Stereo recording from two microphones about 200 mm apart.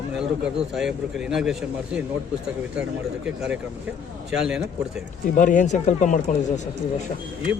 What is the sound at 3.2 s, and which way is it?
Speech, 5° right (ahead or behind).